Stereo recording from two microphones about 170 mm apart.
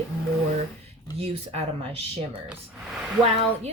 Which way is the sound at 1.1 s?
35° right (ahead or behind).